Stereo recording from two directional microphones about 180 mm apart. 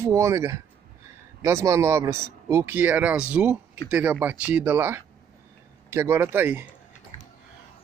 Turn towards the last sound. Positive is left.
turn(degrees=-10)  # may be behind; listen again after turning